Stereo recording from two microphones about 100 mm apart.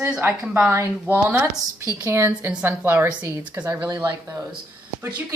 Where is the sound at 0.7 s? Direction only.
25° right (ahead or behind).